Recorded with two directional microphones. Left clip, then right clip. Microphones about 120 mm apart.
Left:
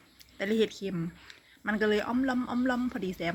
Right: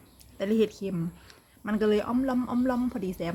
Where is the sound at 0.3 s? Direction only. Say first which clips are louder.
Right 2 dB; 20° right (ahead or behind).